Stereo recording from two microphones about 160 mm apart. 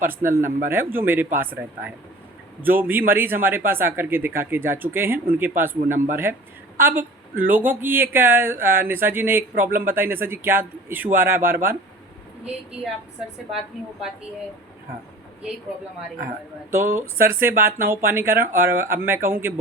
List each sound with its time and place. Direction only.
0.0 s speech: 15° right (ahead or behind)
16.7 s speech: 15° right (ahead or behind)